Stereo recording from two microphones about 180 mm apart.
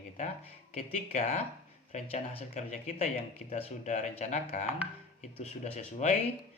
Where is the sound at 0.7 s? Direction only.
40° left (ahead or behind).